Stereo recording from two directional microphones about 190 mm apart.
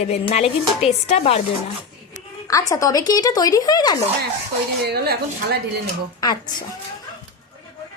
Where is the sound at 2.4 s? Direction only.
15° left (ahead or behind).